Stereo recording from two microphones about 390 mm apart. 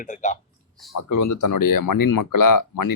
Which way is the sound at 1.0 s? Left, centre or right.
Left.